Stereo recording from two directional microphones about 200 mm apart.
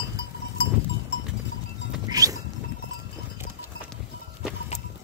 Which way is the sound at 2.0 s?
15° right (ahead or behind).